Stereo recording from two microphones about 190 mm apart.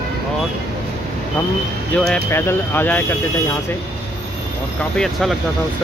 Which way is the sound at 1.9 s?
5° left (ahead or behind).